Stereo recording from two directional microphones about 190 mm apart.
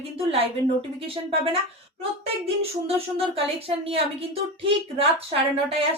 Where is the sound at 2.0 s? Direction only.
30° right (ahead or behind).